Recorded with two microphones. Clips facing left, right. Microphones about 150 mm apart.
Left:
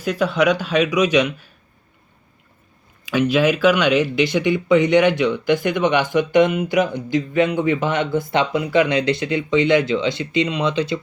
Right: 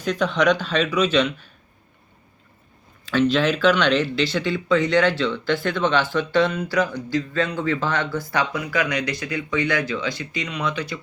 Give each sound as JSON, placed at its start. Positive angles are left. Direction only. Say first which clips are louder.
{"t": 0.0, "sound": "speech", "louder": "left 2 dB", "side_deg": 10}
{"t": 3.1, "sound": "speech", "louder": "left 2 dB", "side_deg": 10}